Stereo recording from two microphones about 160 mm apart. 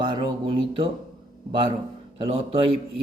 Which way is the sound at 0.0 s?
30° right (ahead or behind).